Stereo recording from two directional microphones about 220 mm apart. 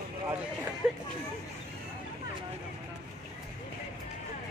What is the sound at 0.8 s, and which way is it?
Speech, 5° right (ahead or behind).